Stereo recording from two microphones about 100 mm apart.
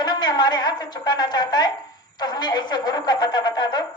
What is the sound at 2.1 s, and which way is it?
Music, 45° left (ahead or behind).